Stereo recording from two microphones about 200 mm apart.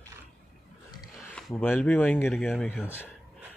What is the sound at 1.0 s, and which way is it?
Speech, centre (ahead or behind).